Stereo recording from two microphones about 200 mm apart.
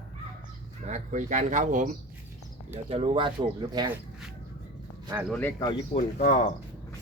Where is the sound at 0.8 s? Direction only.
40° right (ahead or behind).